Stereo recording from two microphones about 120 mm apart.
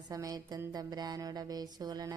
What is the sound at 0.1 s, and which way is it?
Speech, 30° right (ahead or behind).